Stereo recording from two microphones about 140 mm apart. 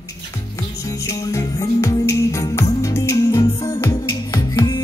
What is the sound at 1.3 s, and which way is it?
Music, 20° left (ahead or behind).